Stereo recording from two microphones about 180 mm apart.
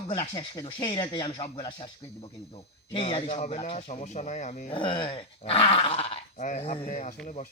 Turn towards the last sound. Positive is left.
turn(degrees=45)  # may be behind; listen again after turning